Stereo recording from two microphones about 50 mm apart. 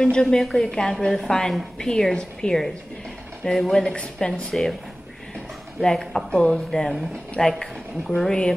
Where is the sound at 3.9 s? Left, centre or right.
Centre.